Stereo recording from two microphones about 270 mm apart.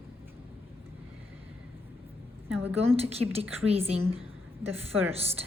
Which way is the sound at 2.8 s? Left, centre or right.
Right.